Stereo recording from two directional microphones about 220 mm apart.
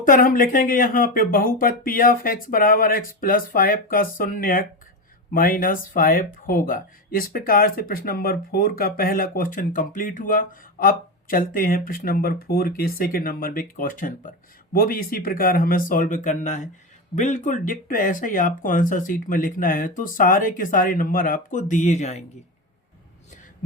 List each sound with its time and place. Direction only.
0.0 s speech: 40° left (ahead or behind)